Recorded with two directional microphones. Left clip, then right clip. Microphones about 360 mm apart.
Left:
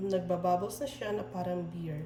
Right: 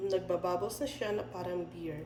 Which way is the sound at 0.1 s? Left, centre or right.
Centre.